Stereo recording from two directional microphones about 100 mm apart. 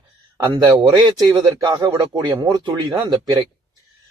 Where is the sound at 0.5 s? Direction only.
40° right (ahead or behind).